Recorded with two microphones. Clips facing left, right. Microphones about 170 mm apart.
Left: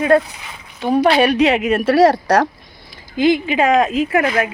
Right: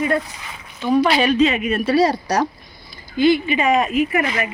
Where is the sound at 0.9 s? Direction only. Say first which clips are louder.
Left 2 dB; 50° left (ahead or behind); by 4.2 s 90° left.